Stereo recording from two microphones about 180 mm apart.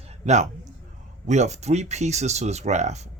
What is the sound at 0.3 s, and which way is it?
Speech, 40° right (ahead or behind).